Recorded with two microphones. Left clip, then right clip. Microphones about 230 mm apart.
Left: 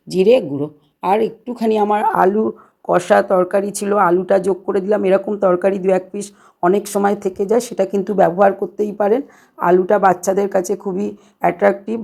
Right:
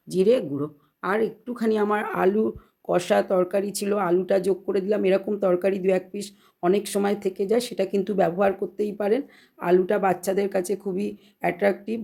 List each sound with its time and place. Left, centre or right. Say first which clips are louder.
0.1 s speech: left 8 dB; right
2.1 s speech: left 8 dB; centre